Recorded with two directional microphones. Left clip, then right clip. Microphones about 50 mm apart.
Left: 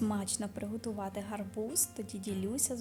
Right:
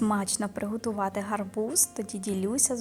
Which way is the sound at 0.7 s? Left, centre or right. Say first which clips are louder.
Right 9 dB; right.